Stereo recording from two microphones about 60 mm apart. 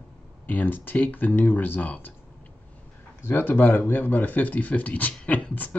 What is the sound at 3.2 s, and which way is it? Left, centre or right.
Speech, left.